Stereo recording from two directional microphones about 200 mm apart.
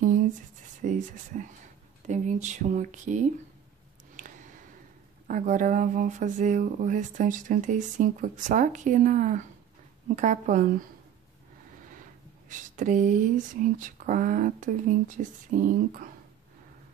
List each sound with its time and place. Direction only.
0.8 s speech: 40° right (ahead or behind)
4.2 s a sound: 40° right (ahead or behind)
5.3 s speech: 40° right (ahead or behind)
12.4 s speech: 40° right (ahead or behind)